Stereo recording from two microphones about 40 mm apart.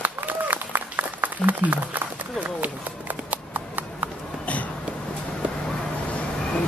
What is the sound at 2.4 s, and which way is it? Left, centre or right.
Horse, right.